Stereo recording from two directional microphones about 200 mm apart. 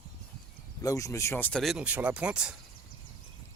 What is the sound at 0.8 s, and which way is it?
Speech, 15° left (ahead or behind).